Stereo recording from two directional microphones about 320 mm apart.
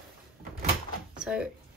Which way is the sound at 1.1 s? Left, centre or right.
Centre.